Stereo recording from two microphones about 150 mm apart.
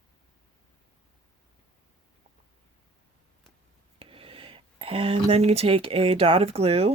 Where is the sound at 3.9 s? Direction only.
35° right (ahead or behind).